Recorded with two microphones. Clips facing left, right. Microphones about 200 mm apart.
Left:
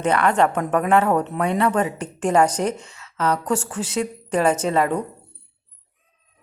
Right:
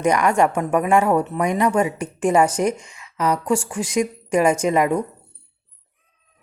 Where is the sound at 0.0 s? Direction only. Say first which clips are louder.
Right 1 dB; 10° right (ahead or behind).